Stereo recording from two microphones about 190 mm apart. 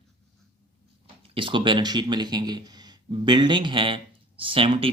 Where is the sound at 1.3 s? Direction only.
25° right (ahead or behind).